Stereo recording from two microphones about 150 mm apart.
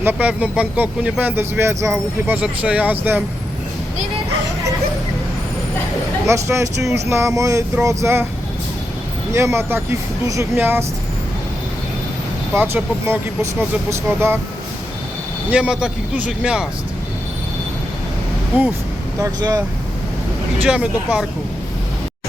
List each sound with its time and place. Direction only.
0.0 s speech: 10° right (ahead or behind)
6.2 s a sound: 20° right (ahead or behind)
9.3 s speech: 20° right (ahead or behind)
12.5 s speech: 15° right (ahead or behind)
15.4 s speech: 5° right (ahead or behind)
19.2 s a sound: 20° right (ahead or behind)
20.6 s speech: 5° right (ahead or behind)